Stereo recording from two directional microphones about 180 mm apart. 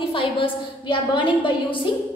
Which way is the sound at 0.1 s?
30° left (ahead or behind).